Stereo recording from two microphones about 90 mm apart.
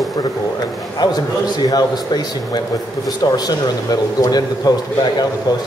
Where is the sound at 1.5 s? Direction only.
45° left (ahead or behind).